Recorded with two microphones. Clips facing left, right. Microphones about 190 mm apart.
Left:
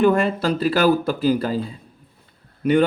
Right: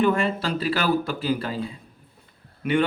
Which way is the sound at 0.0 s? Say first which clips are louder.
Left 4 dB; 45° left (ahead or behind).